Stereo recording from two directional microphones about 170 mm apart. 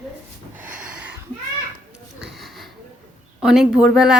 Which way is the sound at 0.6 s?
10° right (ahead or behind).